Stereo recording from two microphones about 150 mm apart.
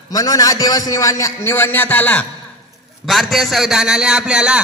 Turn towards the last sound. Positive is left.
turn(degrees=-5)  # may be behind; listen again after turning